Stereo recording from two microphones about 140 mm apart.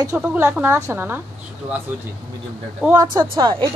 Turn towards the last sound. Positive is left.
turn(degrees=-30)  # may be behind; listen again after turning